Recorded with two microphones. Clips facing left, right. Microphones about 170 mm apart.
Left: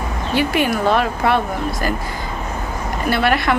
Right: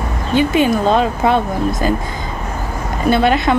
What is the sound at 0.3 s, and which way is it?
A woman's voice, 20° right (ahead or behind).